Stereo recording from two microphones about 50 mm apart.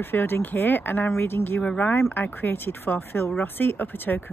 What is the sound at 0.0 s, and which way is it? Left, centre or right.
Speech, left.